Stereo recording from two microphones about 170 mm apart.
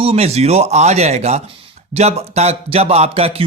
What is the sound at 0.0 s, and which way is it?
Speech, 35° right (ahead or behind).